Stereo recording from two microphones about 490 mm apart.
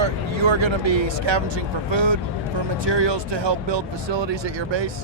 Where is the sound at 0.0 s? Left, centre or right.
Right.